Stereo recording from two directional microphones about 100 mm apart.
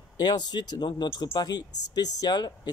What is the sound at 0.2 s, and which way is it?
Speech, 45° left (ahead or behind).